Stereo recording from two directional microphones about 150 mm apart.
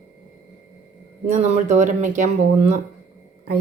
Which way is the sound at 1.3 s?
50° right (ahead or behind).